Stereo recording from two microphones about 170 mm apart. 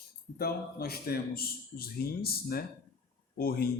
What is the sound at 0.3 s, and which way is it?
Speech, 65° left (ahead or behind).